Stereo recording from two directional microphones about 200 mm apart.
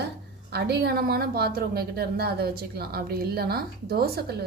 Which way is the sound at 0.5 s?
55° right (ahead or behind).